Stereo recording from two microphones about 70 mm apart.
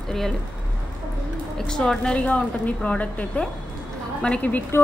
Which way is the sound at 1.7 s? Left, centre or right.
Centre.